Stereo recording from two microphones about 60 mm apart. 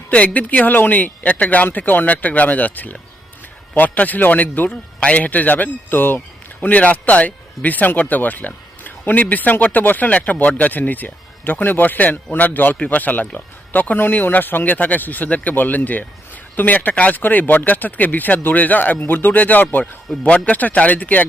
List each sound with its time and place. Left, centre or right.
0.1 s a man's voice: left